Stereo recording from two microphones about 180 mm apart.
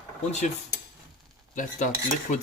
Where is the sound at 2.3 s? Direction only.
45° left (ahead or behind).